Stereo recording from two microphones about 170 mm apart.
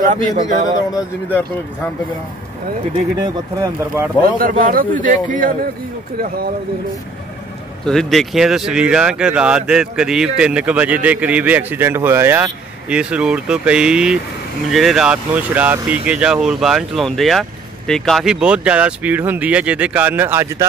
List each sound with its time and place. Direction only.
0.0 s speech: 45° right (ahead or behind)
4.4 s speech: 55° right (ahead or behind)
7.8 s speech: 5° left (ahead or behind); by 20.6 s 15° right (ahead or behind)